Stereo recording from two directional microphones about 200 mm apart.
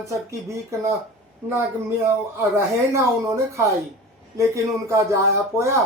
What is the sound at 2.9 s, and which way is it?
Speech, 15° right (ahead or behind).